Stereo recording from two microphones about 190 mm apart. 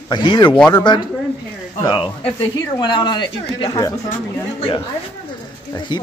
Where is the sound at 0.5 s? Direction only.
5° left (ahead or behind).